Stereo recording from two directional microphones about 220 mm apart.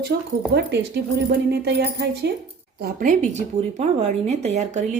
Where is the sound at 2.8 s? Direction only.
40° right (ahead or behind).